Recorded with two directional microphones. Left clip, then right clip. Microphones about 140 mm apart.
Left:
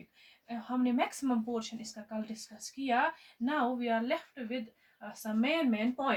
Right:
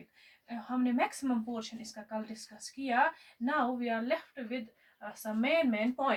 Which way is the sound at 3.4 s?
40° left (ahead or behind).